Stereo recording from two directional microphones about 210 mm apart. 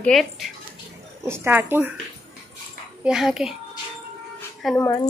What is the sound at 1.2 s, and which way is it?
Speech, 10° right (ahead or behind).